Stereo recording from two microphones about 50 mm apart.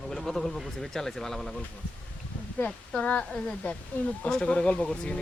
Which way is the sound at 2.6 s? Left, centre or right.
Left.